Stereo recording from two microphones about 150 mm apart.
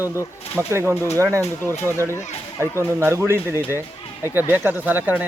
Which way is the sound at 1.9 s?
15° left (ahead or behind).